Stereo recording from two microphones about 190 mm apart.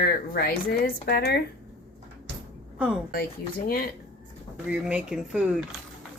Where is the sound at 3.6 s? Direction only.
55° left (ahead or behind).